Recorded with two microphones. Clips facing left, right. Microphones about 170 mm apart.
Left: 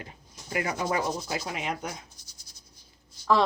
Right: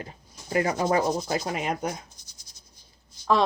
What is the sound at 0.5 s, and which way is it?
Rub, 35° right (ahead or behind).